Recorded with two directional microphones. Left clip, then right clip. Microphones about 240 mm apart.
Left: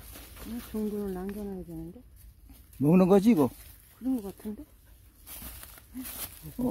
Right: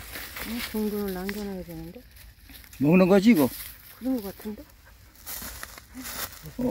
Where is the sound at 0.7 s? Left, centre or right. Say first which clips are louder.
Right 2 dB; centre.